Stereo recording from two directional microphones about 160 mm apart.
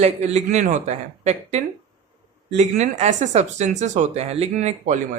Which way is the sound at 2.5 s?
45° right (ahead or behind).